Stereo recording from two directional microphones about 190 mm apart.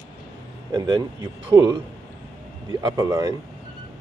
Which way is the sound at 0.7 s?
20° right (ahead or behind).